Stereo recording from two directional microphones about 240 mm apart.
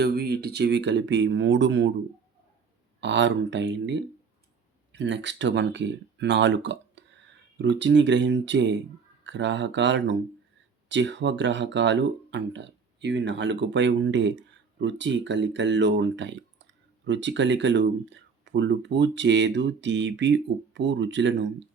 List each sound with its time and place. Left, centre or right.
0.0 s speech: right
3.0 s speech: right